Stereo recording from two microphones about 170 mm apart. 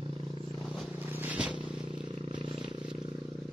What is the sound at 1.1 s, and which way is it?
Vehicle, 10° right (ahead or behind).